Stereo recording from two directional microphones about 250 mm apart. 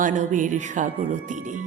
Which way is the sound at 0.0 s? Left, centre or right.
Right.